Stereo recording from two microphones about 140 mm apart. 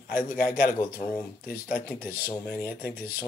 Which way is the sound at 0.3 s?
90° left.